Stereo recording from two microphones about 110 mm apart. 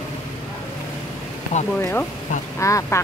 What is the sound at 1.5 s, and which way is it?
Speech, 90° left.